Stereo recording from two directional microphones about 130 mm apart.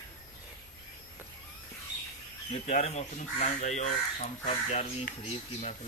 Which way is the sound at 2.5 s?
55° left (ahead or behind).